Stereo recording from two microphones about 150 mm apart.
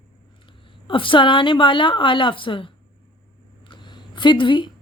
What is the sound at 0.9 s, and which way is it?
A woman's voice, 35° left (ahead or behind).